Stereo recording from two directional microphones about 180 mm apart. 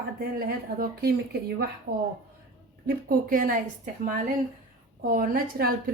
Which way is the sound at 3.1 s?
50° right (ahead or behind).